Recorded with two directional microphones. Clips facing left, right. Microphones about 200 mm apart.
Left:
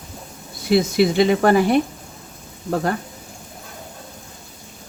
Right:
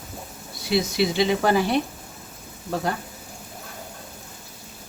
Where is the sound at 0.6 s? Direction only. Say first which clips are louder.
Left 6 dB; 55° left (ahead or behind).